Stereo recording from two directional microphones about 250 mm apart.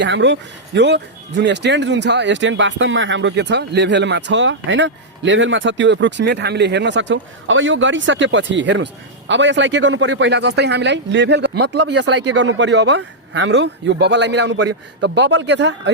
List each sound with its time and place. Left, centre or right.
0.0 s speech: right